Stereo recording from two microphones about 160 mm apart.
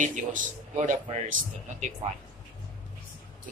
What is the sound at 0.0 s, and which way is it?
Speech, 55° right (ahead or behind).